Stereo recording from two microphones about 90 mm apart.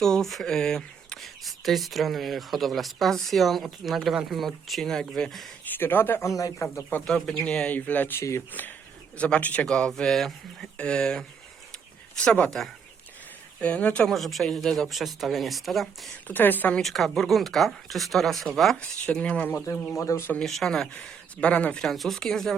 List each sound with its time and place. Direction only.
0.0 s speech: 5° left (ahead or behind)
5.6 s speech: 20° left (ahead or behind)
6.3 s speech: 35° left (ahead or behind)
6.9 s a woman's voice: 10° left (ahead or behind)
11.7 s a sound: 10° left (ahead or behind)
13.6 s speech: 15° left (ahead or behind)
14.1 s speech: centre (ahead or behind)
16.2 s a woman's voice: 20° left (ahead or behind)
16.8 s speech: centre (ahead or behind); by 19.6 s 20° left (ahead or behind)
20.0 s speech: 30° left (ahead or behind)
20.4 s speech: 5° left (ahead or behind)
20.9 s speech: 15° left (ahead or behind)